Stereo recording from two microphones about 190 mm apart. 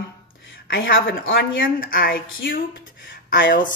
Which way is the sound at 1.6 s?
50° left (ahead or behind).